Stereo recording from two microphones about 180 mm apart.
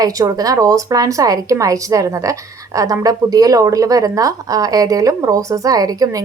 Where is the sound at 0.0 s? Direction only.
20° right (ahead or behind).